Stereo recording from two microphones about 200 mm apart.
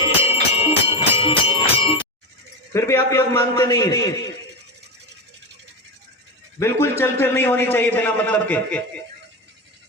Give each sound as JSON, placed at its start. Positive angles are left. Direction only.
{"t": 0.2, "sound": "a sound", "side_deg": 30}
{"t": 2.7, "sound": "a man's voice", "side_deg": 10}
{"t": 6.6, "sound": "a man's voice", "side_deg": 15}